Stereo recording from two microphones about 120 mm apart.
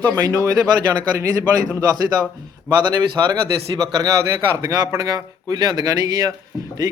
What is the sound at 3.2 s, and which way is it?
A man's voice, 30° right (ahead or behind).